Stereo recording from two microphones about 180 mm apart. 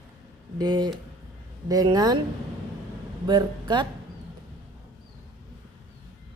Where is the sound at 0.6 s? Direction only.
20° right (ahead or behind).